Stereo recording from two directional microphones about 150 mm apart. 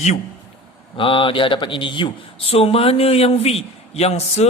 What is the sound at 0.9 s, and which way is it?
Speech, 35° left (ahead or behind).